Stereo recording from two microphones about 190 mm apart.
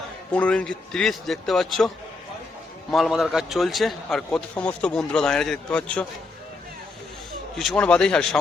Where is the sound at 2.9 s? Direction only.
Centre (ahead or behind).